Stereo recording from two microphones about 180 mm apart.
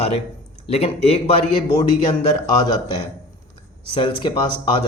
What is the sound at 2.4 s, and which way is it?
A man's voice, 20° left (ahead or behind).